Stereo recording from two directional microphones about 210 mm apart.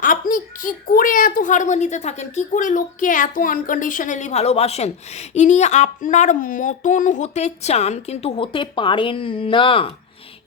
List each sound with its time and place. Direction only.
0.0 s a child's voice: 40° left (ahead or behind); by 9.9 s 25° left (ahead or behind)